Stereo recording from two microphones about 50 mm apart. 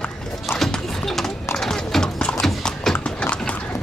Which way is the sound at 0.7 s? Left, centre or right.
Centre.